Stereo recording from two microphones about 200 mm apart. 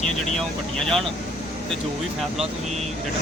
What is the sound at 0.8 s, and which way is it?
Speech, 5° left (ahead or behind).